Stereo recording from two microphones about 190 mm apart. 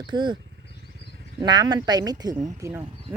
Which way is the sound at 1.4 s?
20° right (ahead or behind).